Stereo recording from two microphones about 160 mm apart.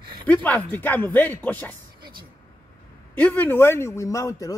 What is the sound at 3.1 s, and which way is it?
Speech, 10° left (ahead or behind).